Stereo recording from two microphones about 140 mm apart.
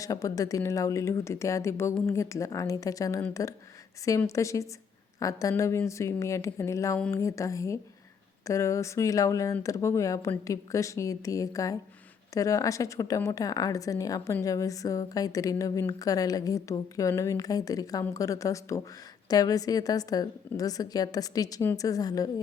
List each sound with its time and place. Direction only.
0.0 s a woman's voice: 25° left (ahead or behind)